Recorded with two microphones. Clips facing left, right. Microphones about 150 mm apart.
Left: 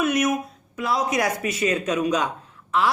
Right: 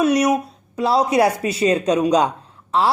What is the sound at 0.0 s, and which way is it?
Speech, 35° right (ahead or behind).